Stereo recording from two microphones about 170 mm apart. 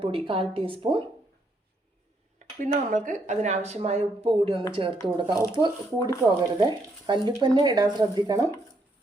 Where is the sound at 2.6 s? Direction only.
50° right (ahead or behind); by 6.1 s 25° right (ahead or behind).